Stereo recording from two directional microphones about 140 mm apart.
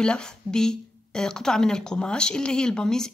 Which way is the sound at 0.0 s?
5° left (ahead or behind).